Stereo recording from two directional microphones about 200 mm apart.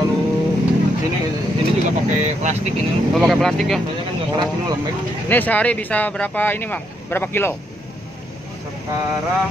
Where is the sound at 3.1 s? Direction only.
Centre (ahead or behind).